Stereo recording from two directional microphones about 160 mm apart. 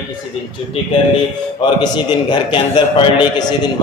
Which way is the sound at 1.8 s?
25° left (ahead or behind).